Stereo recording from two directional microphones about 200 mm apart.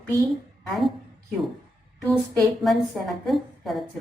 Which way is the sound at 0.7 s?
Centre (ahead or behind).